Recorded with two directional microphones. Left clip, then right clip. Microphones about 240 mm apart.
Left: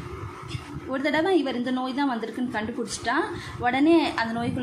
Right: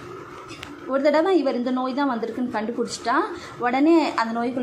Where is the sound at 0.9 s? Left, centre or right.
Centre.